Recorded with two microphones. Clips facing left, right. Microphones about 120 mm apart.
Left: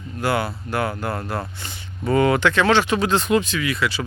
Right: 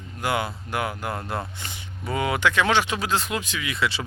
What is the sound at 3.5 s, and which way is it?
Speech, 20° right (ahead or behind).